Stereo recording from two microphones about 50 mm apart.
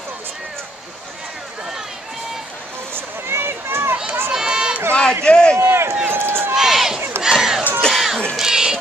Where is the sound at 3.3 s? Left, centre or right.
Right.